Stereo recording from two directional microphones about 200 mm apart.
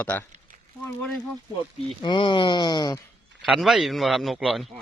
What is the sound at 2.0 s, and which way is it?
Speech, 25° left (ahead or behind).